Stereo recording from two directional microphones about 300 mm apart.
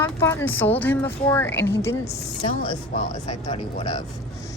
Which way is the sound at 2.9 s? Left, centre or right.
Left.